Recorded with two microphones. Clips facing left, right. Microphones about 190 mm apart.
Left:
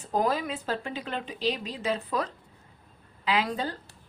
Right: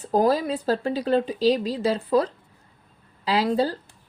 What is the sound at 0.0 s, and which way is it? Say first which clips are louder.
A woman's voice: right 6 dB; 35° right (ahead or behind).